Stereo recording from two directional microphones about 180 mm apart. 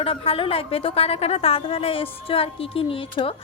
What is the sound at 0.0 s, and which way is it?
A woman's voice, 30° left (ahead or behind).